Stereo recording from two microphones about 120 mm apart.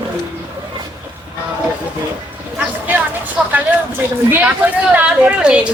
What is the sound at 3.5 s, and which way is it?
Speech, 15° right (ahead or behind).